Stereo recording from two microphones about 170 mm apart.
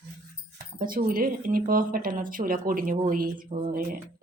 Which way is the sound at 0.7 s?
55° right (ahead or behind).